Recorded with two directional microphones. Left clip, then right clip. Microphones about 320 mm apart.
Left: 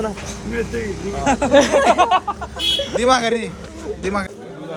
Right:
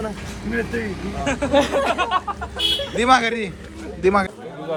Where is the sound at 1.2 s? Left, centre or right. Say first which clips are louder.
Left 5 dB; centre.